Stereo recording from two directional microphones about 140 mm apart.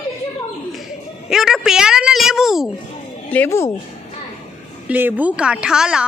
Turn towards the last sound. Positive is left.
turn(degrees=-5)  # may be behind; listen again after turning